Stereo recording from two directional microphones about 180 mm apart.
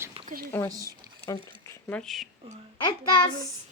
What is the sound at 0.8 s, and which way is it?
Speech, 15° left (ahead or behind).